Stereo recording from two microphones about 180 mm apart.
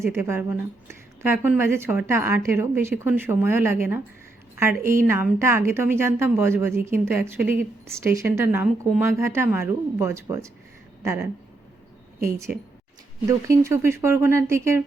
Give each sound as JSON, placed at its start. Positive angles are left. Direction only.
{"t": 0.0, "sound": "speech", "side_deg": -15}
{"t": 13.2, "sound": "speech", "side_deg": -15}